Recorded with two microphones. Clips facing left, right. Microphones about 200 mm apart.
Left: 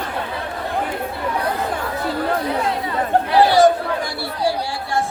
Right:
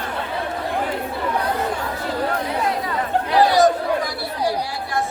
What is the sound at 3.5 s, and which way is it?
Chatter, 30° left (ahead or behind).